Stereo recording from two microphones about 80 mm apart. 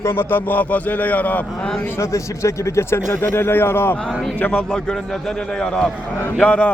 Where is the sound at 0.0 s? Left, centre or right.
Left.